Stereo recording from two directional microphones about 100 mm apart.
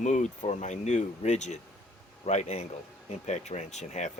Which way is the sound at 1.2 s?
90° left.